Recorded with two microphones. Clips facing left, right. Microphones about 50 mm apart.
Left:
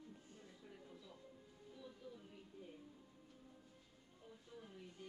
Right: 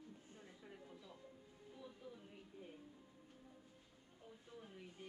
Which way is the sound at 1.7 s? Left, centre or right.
Centre.